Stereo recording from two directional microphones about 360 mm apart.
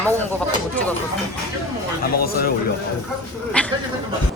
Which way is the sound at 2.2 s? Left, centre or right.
Left.